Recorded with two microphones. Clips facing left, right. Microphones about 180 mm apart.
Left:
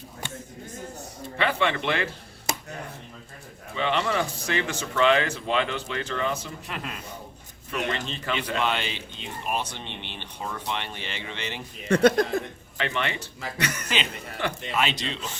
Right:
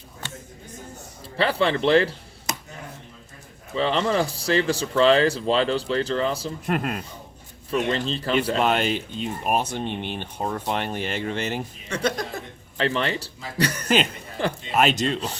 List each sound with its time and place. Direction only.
1.4 s speech: 35° right (ahead or behind)
3.8 s speech: 35° right (ahead or behind)
6.7 s speech: 50° right (ahead or behind)
7.7 s speech: 35° right (ahead or behind)
11.9 s speech: 55° left (ahead or behind)
12.7 s speech: 35° right (ahead or behind)
13.8 s speech: 50° right (ahead or behind)